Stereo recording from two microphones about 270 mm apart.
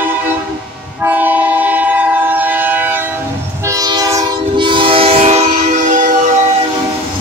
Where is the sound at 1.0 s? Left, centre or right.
Centre; by 5.4 s right.